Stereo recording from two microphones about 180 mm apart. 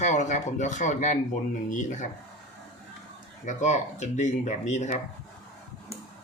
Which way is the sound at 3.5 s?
40° left (ahead or behind).